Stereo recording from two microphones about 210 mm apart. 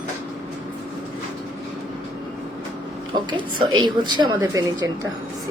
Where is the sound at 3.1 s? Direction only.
20° right (ahead or behind).